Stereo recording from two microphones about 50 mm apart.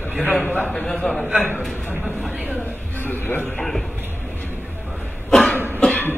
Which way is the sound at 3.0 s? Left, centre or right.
Left.